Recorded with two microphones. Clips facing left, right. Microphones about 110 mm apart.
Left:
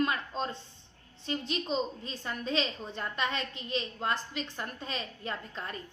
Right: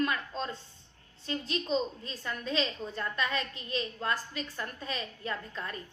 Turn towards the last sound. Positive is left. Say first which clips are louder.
# right 1 dB
turn(degrees=30)  # may be behind; listen again after turning